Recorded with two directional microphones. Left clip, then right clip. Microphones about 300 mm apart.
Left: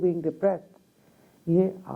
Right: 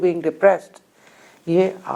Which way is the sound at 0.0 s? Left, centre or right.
Centre.